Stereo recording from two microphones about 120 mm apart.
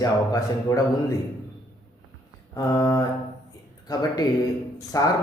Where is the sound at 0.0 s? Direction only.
30° left (ahead or behind).